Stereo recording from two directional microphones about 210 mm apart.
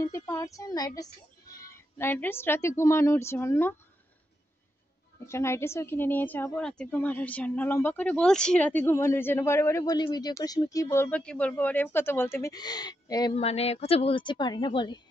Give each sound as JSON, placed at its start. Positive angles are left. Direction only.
{"t": 0.0, "sound": "a woman's voice", "side_deg": 15}
{"t": 5.2, "sound": "a woman's voice", "side_deg": 10}